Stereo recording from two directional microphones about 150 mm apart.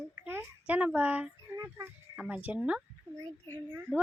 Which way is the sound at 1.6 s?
20° right (ahead or behind).